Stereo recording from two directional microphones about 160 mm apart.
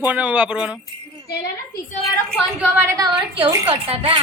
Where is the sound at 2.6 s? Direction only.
20° right (ahead or behind).